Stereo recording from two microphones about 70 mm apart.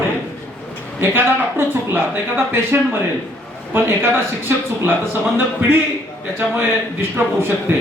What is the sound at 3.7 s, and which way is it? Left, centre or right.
Speech, right.